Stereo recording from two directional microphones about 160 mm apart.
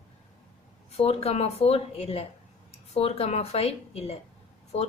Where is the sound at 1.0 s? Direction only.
40° left (ahead or behind).